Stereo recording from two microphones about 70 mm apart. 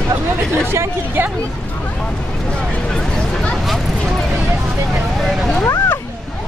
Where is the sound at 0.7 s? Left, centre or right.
Right.